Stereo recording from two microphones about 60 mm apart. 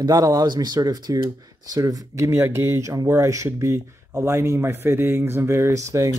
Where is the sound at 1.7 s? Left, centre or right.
Right.